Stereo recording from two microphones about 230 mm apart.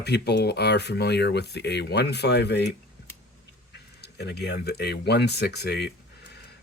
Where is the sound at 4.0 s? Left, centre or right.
Left.